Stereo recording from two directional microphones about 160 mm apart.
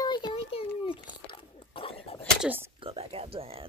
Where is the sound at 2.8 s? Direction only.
35° right (ahead or behind).